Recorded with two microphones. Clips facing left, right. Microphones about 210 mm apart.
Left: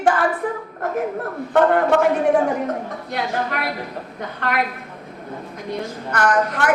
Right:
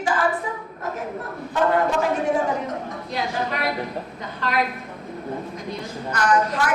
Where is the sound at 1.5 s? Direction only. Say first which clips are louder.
Left 5 dB; 60° left (ahead or behind).